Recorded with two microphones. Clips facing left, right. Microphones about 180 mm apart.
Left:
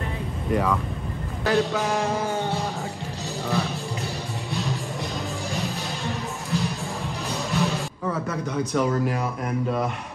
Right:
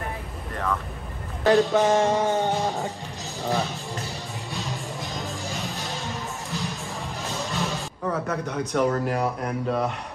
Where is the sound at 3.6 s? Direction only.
Centre (ahead or behind).